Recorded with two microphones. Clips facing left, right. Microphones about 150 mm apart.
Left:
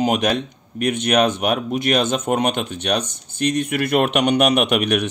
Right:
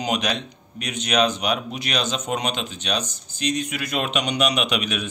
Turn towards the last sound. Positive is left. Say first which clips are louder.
# left 7 dB
turn(degrees=60)  # may be behind; listen again after turning